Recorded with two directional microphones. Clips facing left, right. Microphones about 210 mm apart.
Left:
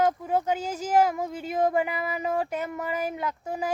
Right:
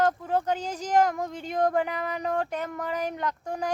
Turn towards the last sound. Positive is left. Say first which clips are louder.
# even
turn(degrees=5)  # may be behind; listen again after turning